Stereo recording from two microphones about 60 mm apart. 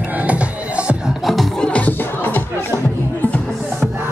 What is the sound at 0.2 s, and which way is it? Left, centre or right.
Music, right.